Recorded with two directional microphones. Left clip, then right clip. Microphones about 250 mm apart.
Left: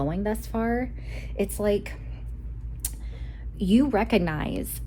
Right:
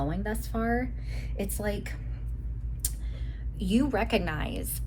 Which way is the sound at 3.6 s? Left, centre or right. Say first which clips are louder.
Left 5 dB; left.